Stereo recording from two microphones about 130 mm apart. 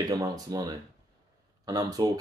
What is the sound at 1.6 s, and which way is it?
Speech, 30° right (ahead or behind).